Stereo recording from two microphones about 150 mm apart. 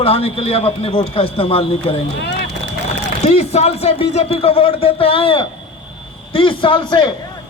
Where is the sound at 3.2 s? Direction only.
45° left (ahead or behind).